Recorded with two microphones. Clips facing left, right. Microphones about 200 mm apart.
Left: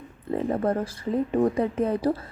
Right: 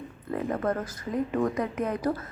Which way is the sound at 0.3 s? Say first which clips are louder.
Left 3 dB; 30° left (ahead or behind).